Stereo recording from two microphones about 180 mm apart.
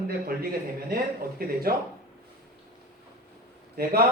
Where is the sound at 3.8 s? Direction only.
60° right (ahead or behind).